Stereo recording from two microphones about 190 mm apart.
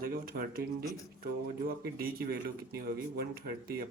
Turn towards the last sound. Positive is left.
turn(degrees=-55)  # may be behind; listen again after turning